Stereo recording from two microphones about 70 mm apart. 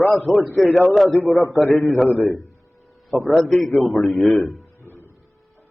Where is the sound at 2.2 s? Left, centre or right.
Left.